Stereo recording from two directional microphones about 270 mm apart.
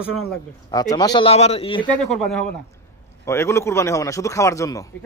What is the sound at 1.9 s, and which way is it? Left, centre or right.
A man's voice, centre.